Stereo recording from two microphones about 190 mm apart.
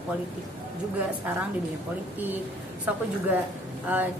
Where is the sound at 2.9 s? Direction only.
5° right (ahead or behind).